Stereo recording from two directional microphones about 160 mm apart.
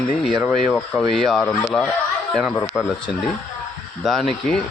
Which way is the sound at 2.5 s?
15° left (ahead or behind).